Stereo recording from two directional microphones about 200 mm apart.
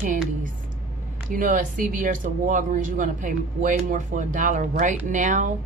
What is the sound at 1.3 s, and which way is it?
Speech, 40° right (ahead or behind).